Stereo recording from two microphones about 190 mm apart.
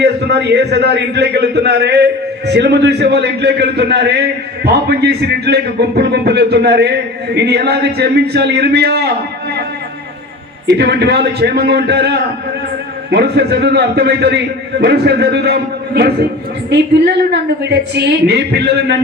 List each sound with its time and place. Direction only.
0.0 s a man's voice: 60° right (ahead or behind)
10.7 s a man's voice: 60° right (ahead or behind)